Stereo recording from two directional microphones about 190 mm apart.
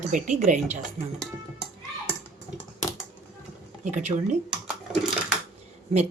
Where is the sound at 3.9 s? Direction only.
40° right (ahead or behind).